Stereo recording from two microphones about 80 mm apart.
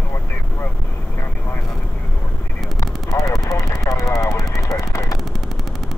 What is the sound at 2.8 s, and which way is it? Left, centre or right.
Vehicle, left.